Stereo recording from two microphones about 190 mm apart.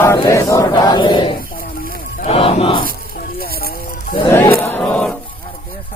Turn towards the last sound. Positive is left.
turn(degrees=10)  # may be behind; listen again after turning